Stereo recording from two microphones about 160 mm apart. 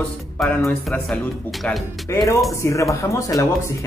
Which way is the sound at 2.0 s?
20° left (ahead or behind).